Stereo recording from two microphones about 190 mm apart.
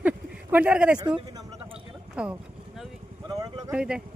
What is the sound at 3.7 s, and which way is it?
Speech, 5° right (ahead or behind).